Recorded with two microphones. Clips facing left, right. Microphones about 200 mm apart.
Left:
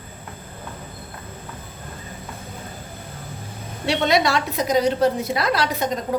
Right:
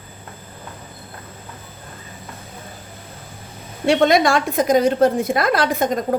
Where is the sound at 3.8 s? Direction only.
50° right (ahead or behind).